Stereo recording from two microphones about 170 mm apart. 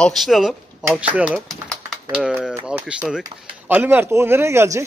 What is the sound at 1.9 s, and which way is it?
Typing, 5° right (ahead or behind).